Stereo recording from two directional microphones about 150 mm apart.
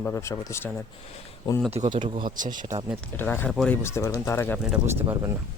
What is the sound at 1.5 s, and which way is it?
Speech, 30° left (ahead or behind).